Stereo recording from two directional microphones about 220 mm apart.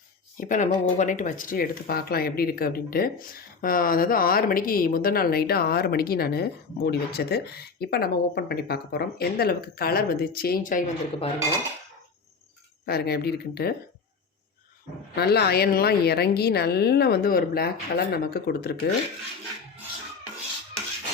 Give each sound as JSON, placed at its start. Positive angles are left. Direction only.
{"t": 0.3, "sound": "speech", "side_deg": 35}
{"t": 12.8, "sound": "speech", "side_deg": 45}
{"t": 15.1, "sound": "speech", "side_deg": 45}